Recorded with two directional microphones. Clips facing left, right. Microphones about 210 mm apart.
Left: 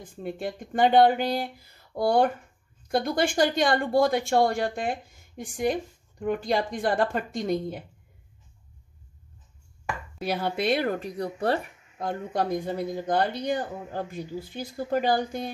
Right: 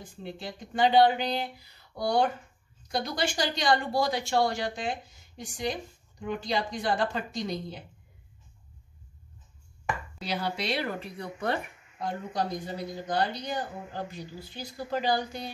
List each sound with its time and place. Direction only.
0.1 s a woman's voice: 55° left (ahead or behind)
10.2 s a woman's voice: 55° left (ahead or behind); by 11.6 s 35° left (ahead or behind)
12.0 s a woman's voice: 55° left (ahead or behind)